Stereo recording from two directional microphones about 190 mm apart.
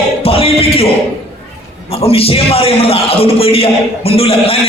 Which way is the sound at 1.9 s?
30° left (ahead or behind).